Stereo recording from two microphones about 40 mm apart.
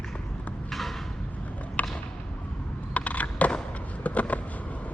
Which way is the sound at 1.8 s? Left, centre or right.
Left.